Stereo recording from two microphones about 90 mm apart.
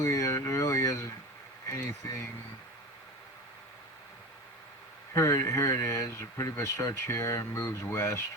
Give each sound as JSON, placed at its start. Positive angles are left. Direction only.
{"t": 0.0, "sound": "speech", "side_deg": 35}
{"t": 5.1, "sound": "speech", "side_deg": 35}